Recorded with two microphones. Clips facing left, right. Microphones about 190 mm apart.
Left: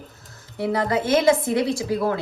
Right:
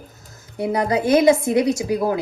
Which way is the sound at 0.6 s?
20° right (ahead or behind).